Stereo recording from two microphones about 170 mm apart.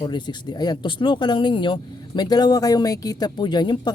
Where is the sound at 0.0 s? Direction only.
25° left (ahead or behind).